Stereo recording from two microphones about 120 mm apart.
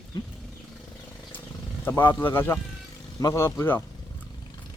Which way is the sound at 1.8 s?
15° left (ahead or behind).